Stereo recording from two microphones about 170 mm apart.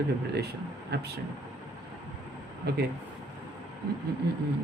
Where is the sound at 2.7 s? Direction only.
70° right (ahead or behind).